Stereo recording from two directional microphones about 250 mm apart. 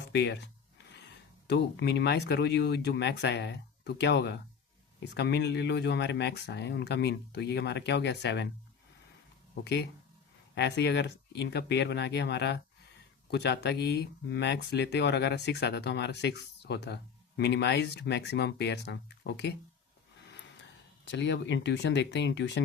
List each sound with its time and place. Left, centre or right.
0.1 s speech: left
10.5 s speech: left
21.0 s speech: left